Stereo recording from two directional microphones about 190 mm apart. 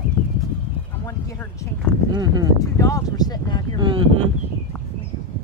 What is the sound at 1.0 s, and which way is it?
Speech, 15° left (ahead or behind).